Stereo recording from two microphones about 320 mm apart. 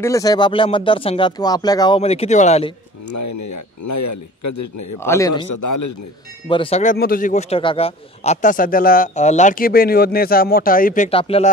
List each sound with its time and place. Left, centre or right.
0.0 s speech: centre
3.1 s a man's voice: left
5.0 s speech: centre
5.3 s a man's voice: left
6.5 s a man's voice: centre